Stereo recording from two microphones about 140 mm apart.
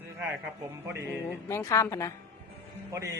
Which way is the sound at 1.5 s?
20° left (ahead or behind).